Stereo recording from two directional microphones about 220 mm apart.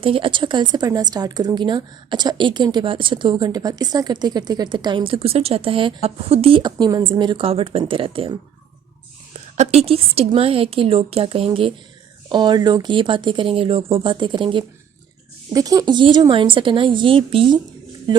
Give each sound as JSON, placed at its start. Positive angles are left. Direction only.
{"t": 0.0, "sound": "a woman's voice", "side_deg": -25}